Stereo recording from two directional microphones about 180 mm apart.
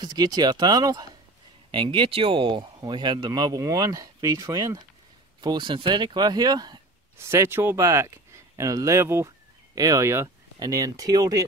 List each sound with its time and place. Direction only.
0.0 s speech: 20° right (ahead or behind)